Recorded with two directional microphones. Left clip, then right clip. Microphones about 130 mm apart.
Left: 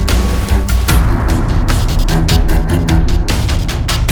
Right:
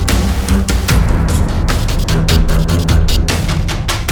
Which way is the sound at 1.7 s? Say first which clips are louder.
Even; centre (ahead or behind).